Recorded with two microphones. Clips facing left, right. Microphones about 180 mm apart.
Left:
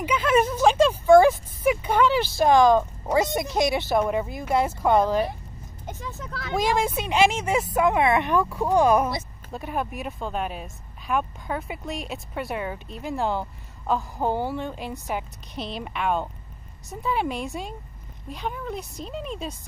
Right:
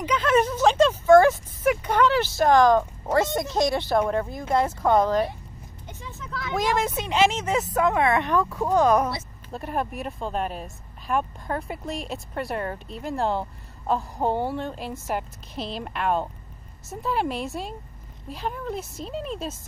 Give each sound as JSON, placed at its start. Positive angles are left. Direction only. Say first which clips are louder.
{"t": 0.0, "sound": "a sound", "louder": "even", "side_deg": 10}
{"t": 4.4, "sound": "speech", "louder": "even", "side_deg": 10}
{"t": 5.9, "sound": "speech", "louder": "left 3 dB", "side_deg": 40}
{"t": 6.7, "sound": "a woman's voice", "louder": "left 1 dB", "side_deg": 10}